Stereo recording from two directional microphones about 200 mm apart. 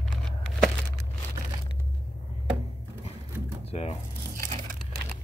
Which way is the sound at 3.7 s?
30° left (ahead or behind).